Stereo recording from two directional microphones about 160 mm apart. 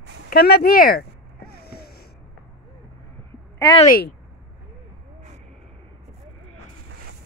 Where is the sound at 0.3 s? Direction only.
75° left (ahead or behind).